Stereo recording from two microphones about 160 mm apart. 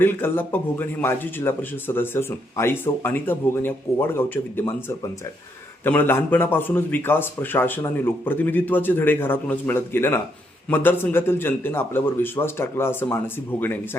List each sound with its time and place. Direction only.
0.0 s a man's voice: 15° left (ahead or behind)